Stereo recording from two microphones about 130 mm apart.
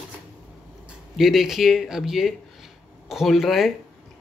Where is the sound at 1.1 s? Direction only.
Centre (ahead or behind).